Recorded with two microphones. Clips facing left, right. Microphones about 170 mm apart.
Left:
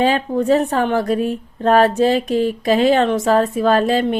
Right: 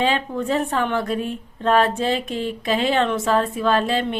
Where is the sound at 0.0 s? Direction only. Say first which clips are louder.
Left 5 dB; 40° left (ahead or behind).